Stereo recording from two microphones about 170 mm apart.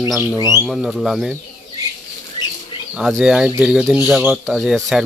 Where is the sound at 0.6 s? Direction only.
Centre (ahead or behind).